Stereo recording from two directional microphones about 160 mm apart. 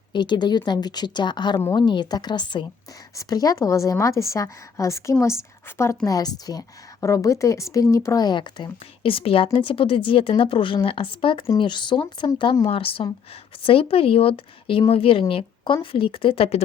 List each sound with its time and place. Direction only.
0.1 s a woman's voice: 30° left (ahead or behind)